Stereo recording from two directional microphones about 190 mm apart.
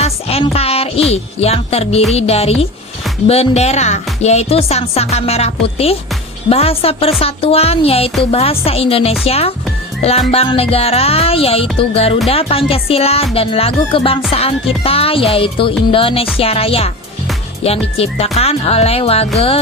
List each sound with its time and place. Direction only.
0.0 s speech: 30° left (ahead or behind)